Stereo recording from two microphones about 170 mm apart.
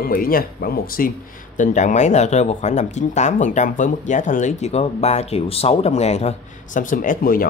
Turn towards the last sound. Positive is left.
turn(degrees=55)  # may be behind; listen again after turning